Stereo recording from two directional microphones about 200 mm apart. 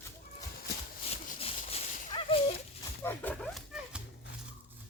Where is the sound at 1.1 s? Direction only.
30° left (ahead or behind).